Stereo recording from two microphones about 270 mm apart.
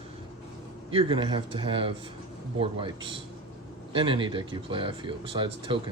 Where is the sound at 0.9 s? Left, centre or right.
Centre.